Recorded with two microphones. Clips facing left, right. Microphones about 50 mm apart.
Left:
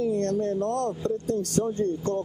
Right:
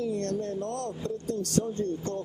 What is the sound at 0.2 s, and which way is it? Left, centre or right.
Speech, left.